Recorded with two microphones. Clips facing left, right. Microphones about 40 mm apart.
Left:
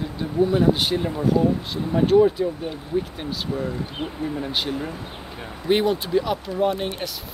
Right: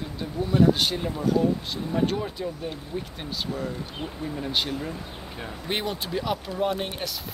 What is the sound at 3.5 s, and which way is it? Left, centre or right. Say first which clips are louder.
Speech: left 6 dB; centre.